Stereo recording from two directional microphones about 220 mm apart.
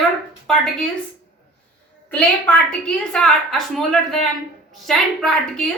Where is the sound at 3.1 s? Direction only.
Centre (ahead or behind).